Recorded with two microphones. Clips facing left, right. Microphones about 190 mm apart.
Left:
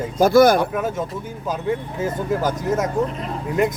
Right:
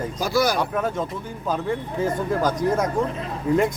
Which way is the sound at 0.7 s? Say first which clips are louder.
Left 1 dB; 5° left (ahead or behind).